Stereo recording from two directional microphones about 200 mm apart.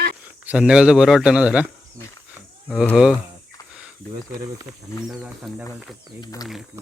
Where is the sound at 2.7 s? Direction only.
Centre (ahead or behind).